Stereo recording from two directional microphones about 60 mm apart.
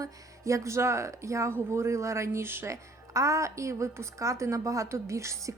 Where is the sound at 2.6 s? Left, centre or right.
Right.